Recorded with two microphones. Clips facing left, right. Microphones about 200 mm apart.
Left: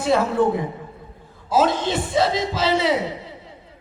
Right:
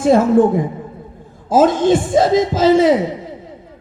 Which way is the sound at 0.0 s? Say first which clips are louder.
Right 7 dB; 45° right (ahead or behind).